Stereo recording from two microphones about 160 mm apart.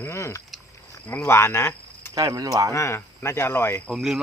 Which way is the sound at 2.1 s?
20° right (ahead or behind).